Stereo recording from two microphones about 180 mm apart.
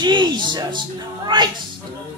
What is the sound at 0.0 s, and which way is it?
A man's voice, 25° right (ahead or behind).